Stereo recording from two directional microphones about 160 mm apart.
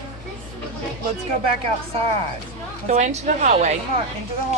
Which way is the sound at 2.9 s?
45° right (ahead or behind).